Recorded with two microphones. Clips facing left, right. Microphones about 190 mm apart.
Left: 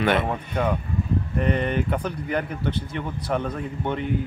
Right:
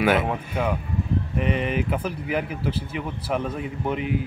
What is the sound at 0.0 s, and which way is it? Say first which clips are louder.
Speech: right 1 dB; 5° right (ahead or behind).